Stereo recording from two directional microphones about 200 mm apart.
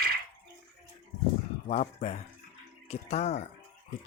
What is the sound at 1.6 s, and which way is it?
Speech, 35° left (ahead or behind).